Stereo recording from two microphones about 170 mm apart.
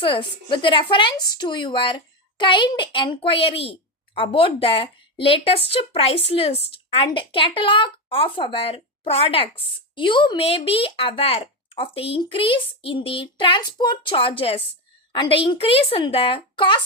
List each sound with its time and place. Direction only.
0.0 s a woman's voice: 30° left (ahead or behind)